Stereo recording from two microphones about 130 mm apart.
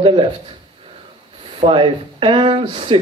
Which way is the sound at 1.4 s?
45° right (ahead or behind).